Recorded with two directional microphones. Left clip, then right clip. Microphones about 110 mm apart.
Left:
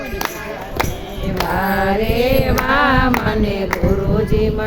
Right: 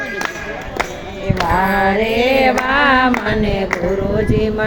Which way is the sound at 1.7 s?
20° left (ahead or behind).